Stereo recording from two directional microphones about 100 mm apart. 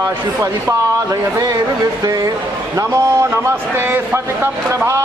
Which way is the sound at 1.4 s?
40° right (ahead or behind).